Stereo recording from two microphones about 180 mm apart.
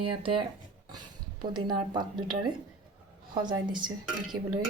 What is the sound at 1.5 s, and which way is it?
Speech, 25° right (ahead or behind).